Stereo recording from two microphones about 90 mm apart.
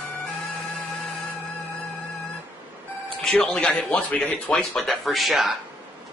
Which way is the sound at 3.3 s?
10° left (ahead or behind).